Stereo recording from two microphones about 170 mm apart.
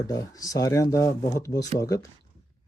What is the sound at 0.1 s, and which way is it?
Speech, 20° left (ahead or behind).